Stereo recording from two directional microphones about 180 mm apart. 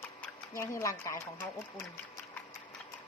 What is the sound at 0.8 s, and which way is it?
Speech, 15° left (ahead or behind).